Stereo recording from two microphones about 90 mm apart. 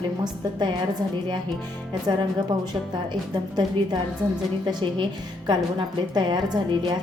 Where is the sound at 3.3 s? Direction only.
55° right (ahead or behind).